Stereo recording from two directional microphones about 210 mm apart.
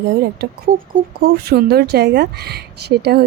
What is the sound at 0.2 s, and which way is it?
Speech, 50° right (ahead or behind).